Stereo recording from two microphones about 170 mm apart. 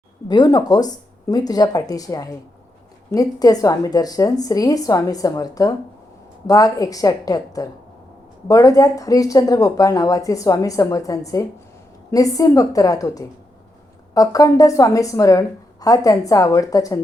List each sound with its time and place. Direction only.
0.3 s speech: 25° left (ahead or behind)